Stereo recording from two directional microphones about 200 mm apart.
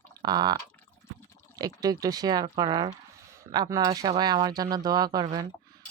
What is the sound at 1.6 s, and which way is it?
Speech, 20° right (ahead or behind).